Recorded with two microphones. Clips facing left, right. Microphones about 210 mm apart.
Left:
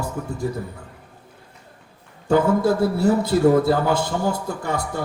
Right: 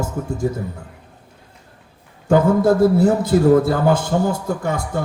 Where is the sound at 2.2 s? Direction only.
50° right (ahead or behind).